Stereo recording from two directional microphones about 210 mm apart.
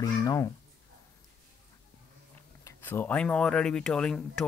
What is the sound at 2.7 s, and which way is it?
Speech, 10° left (ahead or behind).